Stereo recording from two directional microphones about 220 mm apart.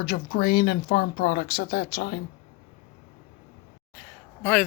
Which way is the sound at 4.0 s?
5° left (ahead or behind).